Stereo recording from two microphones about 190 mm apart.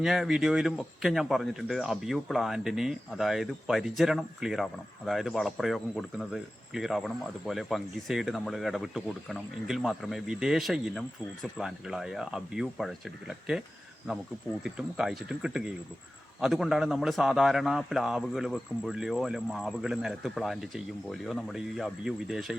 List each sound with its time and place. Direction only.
0.0 s speech: centre (ahead or behind)
14.6 s speech: 5° right (ahead or behind)